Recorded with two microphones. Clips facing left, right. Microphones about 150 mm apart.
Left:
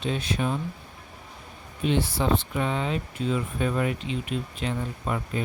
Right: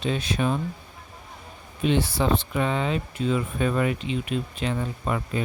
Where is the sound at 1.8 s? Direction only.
90° right.